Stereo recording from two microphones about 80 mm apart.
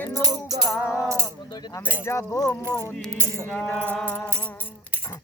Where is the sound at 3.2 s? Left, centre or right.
Right.